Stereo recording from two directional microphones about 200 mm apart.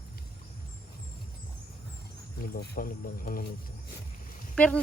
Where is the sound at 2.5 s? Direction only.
45° left (ahead or behind).